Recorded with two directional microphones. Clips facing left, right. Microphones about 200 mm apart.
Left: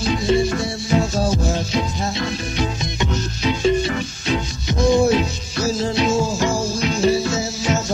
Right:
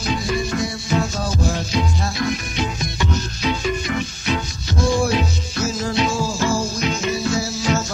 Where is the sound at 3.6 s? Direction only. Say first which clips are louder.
Left 5 dB; 30° left (ahead or behind).